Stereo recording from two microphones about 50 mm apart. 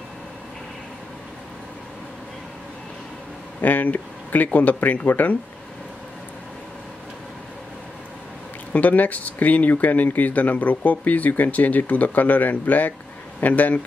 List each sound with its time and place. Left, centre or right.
3.6 s speech: left
8.7 s speech: left